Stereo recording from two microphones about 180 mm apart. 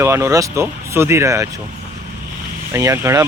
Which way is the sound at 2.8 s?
15° right (ahead or behind).